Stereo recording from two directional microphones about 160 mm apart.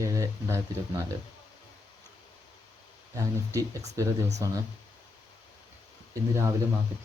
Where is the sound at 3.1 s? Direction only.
20° right (ahead or behind).